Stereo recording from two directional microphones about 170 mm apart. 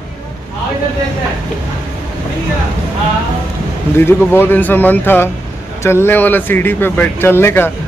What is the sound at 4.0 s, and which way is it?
Speech, 15° left (ahead or behind).